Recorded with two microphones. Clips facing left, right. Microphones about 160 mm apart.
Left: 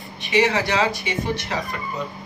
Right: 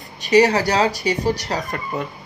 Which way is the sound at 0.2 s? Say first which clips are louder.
Right 5 dB; 40° right (ahead or behind).